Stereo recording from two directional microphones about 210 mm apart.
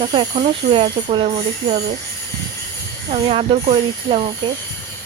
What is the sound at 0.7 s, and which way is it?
Speech, 25° right (ahead or behind).